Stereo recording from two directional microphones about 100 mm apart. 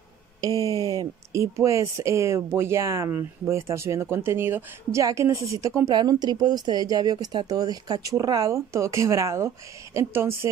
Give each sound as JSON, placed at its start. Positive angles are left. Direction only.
{"t": 0.6, "sound": "speech", "side_deg": -35}
{"t": 5.9, "sound": "speech", "side_deg": -45}